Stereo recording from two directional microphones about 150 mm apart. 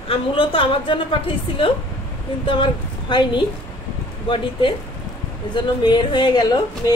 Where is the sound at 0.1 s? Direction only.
35° left (ahead or behind).